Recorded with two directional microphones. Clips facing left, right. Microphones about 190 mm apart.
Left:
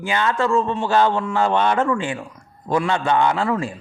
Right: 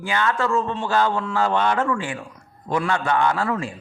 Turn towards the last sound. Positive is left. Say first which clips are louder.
# left 2 dB
turn(degrees=20)  # may be behind; listen again after turning